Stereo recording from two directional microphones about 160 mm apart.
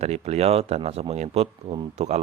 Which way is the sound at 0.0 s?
40° right (ahead or behind).